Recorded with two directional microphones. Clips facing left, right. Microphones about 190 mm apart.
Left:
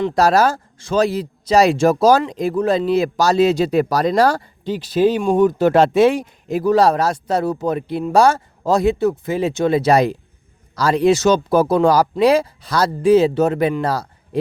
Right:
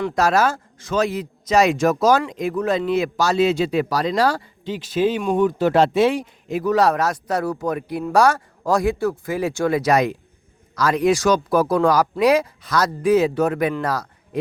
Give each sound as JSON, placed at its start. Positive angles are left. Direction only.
{"t": 0.0, "sound": "speech", "side_deg": 35}